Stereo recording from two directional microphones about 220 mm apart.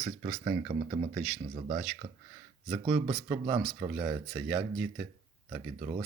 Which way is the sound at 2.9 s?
15° right (ahead or behind).